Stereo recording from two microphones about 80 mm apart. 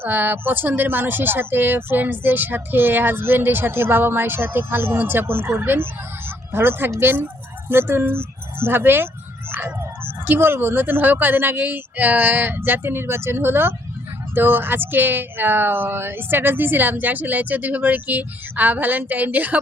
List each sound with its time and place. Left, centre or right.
0.0 s speech: right